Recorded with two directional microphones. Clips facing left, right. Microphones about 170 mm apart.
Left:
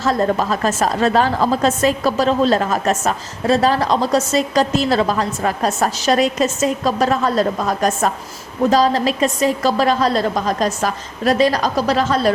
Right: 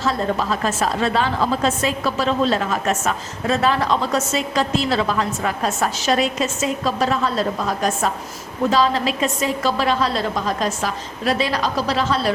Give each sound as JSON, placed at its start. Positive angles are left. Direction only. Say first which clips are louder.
{"t": 0.0, "sound": "a woman's voice", "louder": "left 4 dB", "side_deg": 45}